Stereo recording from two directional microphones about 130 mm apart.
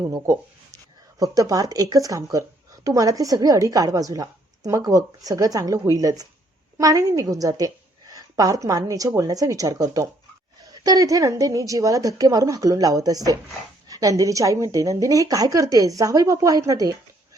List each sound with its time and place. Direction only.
0.0 s a woman's voice: 25° right (ahead or behind)